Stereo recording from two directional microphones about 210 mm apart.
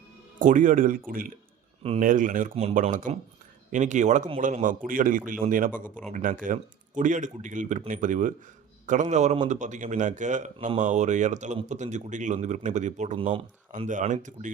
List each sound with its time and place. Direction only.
0.3 s a man's voice: 40° right (ahead or behind)